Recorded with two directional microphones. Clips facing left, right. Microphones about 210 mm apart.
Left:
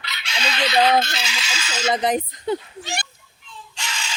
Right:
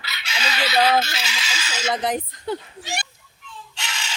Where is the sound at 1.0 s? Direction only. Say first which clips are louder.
Left 1 dB; 5° right (ahead or behind).